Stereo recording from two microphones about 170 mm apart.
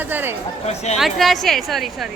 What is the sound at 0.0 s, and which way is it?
Speech, 10° right (ahead or behind).